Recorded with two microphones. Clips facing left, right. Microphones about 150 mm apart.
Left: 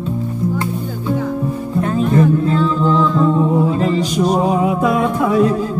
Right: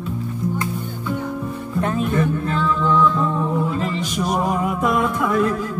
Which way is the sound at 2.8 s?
30° left (ahead or behind).